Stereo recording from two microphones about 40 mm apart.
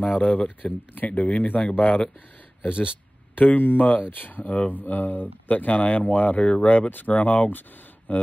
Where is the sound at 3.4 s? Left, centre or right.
Left.